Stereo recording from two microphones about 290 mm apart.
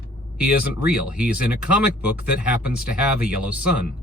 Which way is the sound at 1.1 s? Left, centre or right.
Centre.